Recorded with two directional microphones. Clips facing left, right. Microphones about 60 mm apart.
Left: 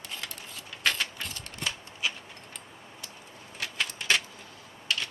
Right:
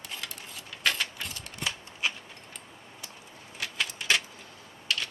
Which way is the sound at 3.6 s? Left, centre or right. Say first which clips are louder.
Even; centre.